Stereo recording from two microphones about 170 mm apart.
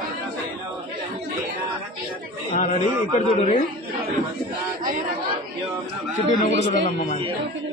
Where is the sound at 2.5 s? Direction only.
45° left (ahead or behind).